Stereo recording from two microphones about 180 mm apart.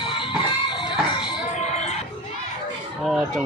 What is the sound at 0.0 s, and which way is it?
Music, 25° left (ahead or behind).